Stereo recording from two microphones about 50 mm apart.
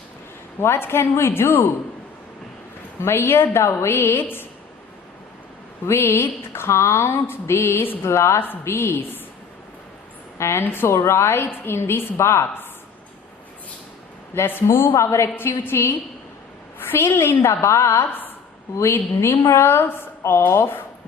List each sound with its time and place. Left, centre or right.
0.6 s a woman's voice: left
3.0 s a woman's voice: left
5.8 s a woman's voice: left
10.3 s a woman's voice: left
10.6 s a woman's voice: left
10.8 s a woman's voice: left
11.4 s a woman's voice: left
12.1 s a woman's voice: left
14.3 s a woman's voice: left
16.9 s a woman's voice: left
17.5 s a woman's voice: left
19.2 s a woman's voice: left